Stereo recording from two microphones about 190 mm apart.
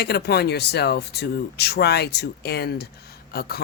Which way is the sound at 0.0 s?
55° left (ahead or behind).